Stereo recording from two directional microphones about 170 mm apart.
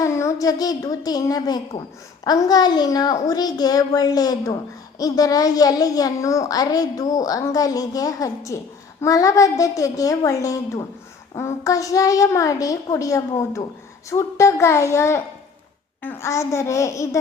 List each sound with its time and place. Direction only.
0.0 s a woman's voice: 20° left (ahead or behind)